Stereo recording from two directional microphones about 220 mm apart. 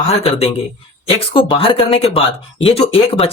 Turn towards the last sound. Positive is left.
turn(degrees=25)  # may be behind; listen again after turning